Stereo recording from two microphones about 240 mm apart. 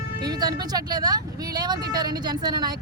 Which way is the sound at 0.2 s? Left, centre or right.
Centre.